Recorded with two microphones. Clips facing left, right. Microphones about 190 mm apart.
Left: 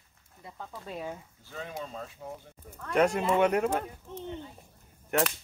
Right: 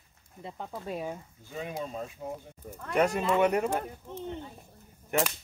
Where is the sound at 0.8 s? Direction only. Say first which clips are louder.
Right 2 dB; 10° right (ahead or behind).